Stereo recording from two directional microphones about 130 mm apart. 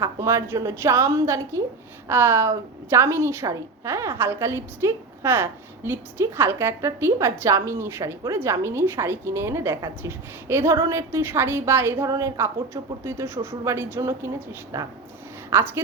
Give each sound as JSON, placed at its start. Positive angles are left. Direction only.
{"t": 0.0, "sound": "a woman's voice", "side_deg": -25}